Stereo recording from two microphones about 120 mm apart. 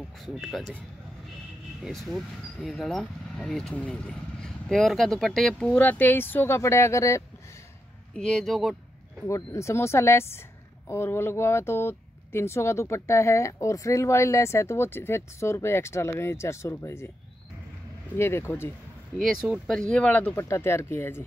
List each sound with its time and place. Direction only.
0.3 s speech: centre (ahead or behind)
1.9 s speech: centre (ahead or behind); by 7.2 s 25° left (ahead or behind)
8.1 s speech: 5° left (ahead or behind)
9.2 s speech: 25° left (ahead or behind)
18.1 s speech: 20° left (ahead or behind)
19.2 s speech: 5° right (ahead or behind)
19.7 s speech: 10° left (ahead or behind)